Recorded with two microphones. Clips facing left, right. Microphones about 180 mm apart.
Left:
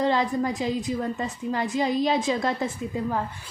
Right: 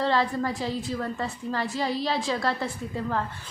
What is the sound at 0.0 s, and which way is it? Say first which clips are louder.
A woman's voice: left 2 dB; 15° left (ahead or behind).